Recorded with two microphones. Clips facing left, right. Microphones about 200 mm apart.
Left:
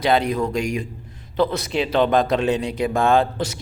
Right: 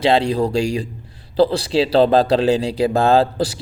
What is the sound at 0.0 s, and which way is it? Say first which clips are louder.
A man's voice: right 3 dB; 30° right (ahead or behind).